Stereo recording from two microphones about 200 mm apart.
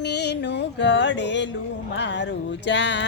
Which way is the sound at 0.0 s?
60° left (ahead or behind).